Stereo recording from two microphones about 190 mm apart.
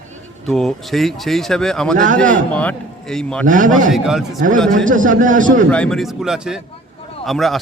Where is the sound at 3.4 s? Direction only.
45° right (ahead or behind).